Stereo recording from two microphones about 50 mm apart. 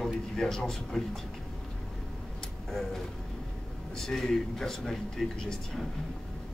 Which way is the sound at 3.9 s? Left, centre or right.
Centre.